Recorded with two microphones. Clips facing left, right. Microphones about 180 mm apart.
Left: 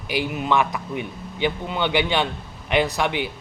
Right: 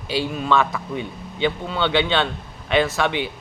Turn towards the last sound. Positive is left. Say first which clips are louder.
# right 1 dB
turn(degrees=15)  # may be behind; listen again after turning